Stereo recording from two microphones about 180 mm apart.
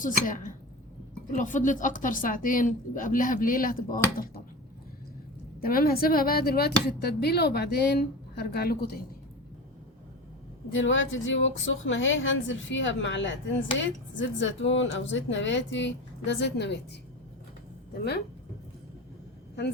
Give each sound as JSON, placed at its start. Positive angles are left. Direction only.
{"t": 0.0, "sound": "speech", "side_deg": 45}
{"t": 5.5, "sound": "a woman's voice", "side_deg": 55}
{"t": 10.7, "sound": "speech", "side_deg": 90}